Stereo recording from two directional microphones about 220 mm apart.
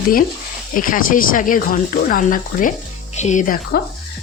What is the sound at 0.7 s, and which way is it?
Speech, 40° left (ahead or behind).